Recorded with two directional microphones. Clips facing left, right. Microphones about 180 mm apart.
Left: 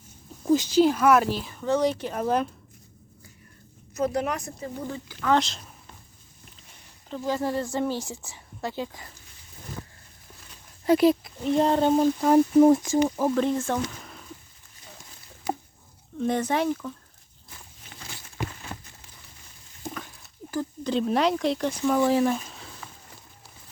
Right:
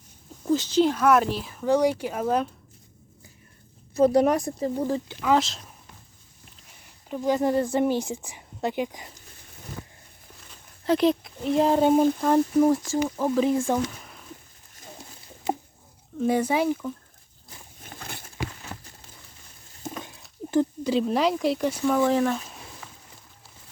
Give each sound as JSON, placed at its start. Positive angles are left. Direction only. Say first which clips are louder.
{"t": 0.4, "sound": "speech", "louder": "left 2 dB", "side_deg": 10}
{"t": 1.6, "sound": "a woman's voice", "louder": "right 2 dB", "side_deg": -10}
{"t": 3.9, "sound": "speech", "louder": "right 8 dB", "side_deg": -30}
{"t": 5.2, "sound": "speech", "louder": "even", "side_deg": -5}
{"t": 7.1, "sound": "a woman's voice", "louder": "right 4 dB", "side_deg": -20}
{"t": 10.8, "sound": "speech", "louder": "left 2 dB", "side_deg": 10}
{"t": 12.7, "sound": "speech", "louder": "left 3 dB", "side_deg": 20}
{"t": 13.1, "sound": "speech", "louder": "right 1 dB", "side_deg": 0}
{"t": 15.5, "sound": "a sound", "louder": "right 2 dB", "side_deg": -25}
{"t": 16.1, "sound": "a woman's voice", "louder": "right 2 dB", "side_deg": -10}
{"t": 17.8, "sound": "a sound", "louder": "right 5 dB", "side_deg": -55}
{"t": 20.4, "sound": "a sound", "louder": "right 6 dB", "side_deg": -20}
{"t": 20.8, "sound": "speech", "louder": "right 1 dB", "side_deg": -5}